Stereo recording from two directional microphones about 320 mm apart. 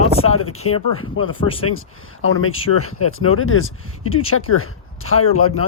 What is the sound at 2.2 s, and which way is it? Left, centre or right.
Speech, left.